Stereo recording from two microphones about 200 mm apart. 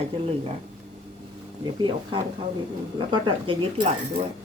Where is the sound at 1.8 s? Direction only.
25° right (ahead or behind).